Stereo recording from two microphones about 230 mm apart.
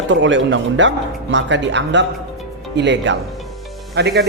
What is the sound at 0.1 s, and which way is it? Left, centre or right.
Speech, right.